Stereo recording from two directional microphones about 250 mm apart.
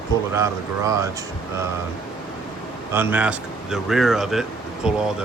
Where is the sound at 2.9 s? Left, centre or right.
Centre.